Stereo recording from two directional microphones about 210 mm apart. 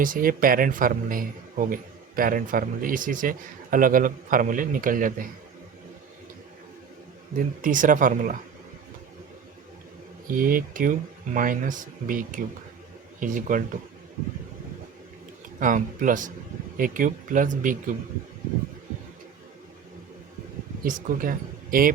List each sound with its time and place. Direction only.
0.0 s speech: 40° right (ahead or behind)
7.3 s speech: 40° right (ahead or behind)
10.3 s speech: 40° right (ahead or behind)
15.6 s speech: 40° right (ahead or behind)
20.8 s speech: 40° right (ahead or behind)